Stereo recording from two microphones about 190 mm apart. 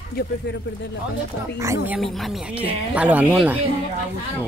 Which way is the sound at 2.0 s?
Centre (ahead or behind).